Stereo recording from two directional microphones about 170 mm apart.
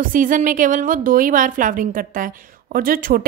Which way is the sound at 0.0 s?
50° right (ahead or behind).